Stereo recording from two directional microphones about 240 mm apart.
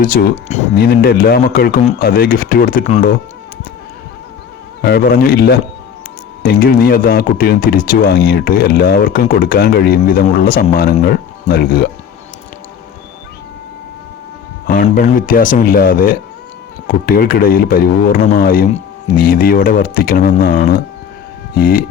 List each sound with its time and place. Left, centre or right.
0.0 s speech: left
4.8 s speech: left
14.7 s speech: left